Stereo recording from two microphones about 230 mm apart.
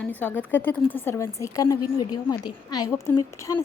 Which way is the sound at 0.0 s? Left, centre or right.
Centre.